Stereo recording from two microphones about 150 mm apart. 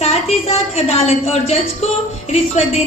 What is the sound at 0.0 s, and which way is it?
A woman's voice, 45° left (ahead or behind).